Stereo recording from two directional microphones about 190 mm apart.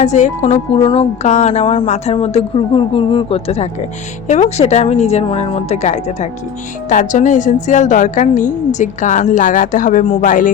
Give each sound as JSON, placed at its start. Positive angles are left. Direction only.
{"t": 0.0, "sound": "a woman's voice", "side_deg": 40}